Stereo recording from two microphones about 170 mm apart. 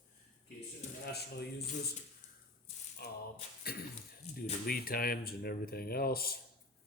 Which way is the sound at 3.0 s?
65° left (ahead or behind).